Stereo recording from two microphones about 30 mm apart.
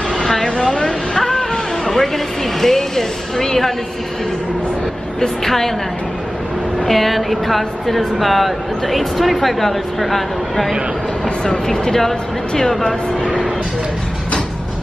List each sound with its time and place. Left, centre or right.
0.2 s vehicle: centre
1.1 s music: centre
2.6 s speech: centre
5.2 s speech: centre
6.9 s a woman's voice: centre
11.7 s speech: centre